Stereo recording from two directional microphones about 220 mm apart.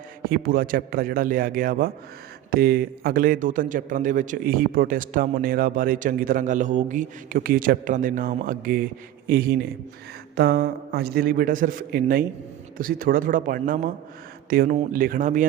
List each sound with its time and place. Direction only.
0.3 s a man's voice: 40° right (ahead or behind)